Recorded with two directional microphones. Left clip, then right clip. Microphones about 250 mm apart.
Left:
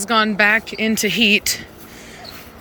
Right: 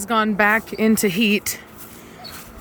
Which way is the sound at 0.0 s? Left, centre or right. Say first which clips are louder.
Left 2 dB; centre.